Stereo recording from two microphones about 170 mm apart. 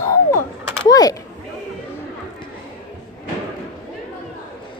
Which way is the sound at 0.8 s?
20° left (ahead or behind).